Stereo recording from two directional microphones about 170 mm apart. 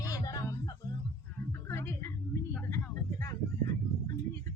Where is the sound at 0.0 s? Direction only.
20° left (ahead or behind).